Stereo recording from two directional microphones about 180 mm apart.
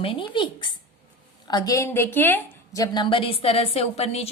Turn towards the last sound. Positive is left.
turn(degrees=35)  # may be behind; listen again after turning